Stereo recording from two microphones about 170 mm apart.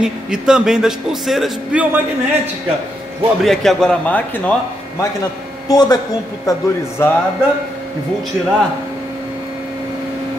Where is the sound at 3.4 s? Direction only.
Centre (ahead or behind).